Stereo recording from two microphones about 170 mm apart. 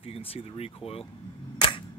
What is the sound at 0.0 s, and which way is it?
Speech, 35° left (ahead or behind).